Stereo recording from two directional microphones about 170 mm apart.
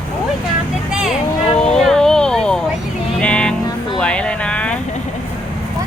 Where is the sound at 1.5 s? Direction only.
5° left (ahead or behind).